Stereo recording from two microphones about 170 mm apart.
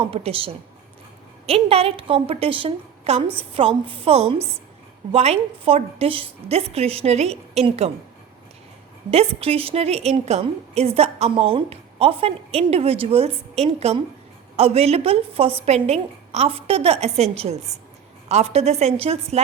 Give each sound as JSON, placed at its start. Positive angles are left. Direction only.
{"t": 0.0, "sound": "a woman's voice", "side_deg": -35}
{"t": 9.0, "sound": "a woman's voice", "side_deg": -35}